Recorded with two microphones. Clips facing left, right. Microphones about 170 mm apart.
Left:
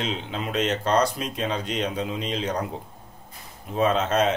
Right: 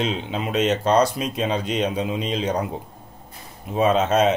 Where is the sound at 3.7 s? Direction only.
20° right (ahead or behind).